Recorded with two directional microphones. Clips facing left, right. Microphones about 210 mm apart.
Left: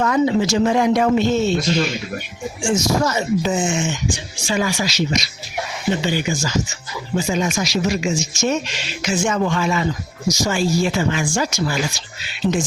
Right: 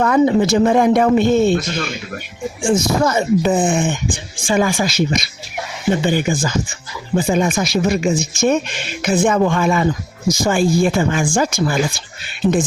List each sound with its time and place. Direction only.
0.0 s speech: 50° right (ahead or behind)
12.4 s speech: 15° right (ahead or behind)